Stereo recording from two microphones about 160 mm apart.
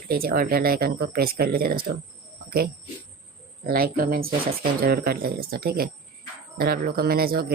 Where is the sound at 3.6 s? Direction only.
70° right (ahead or behind).